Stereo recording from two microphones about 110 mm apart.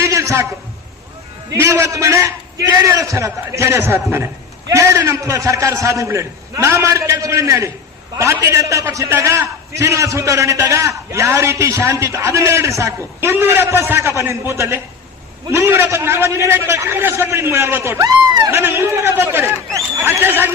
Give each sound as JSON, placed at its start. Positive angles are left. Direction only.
{"t": 0.0, "sound": "a sound", "side_deg": -25}
{"t": 1.5, "sound": "a man's voice", "side_deg": -25}
{"t": 18.0, "sound": "speech", "side_deg": -35}
{"t": 18.5, "sound": "a man's voice", "side_deg": -20}